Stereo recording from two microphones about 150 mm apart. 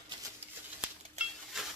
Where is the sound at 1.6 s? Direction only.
5° right (ahead or behind).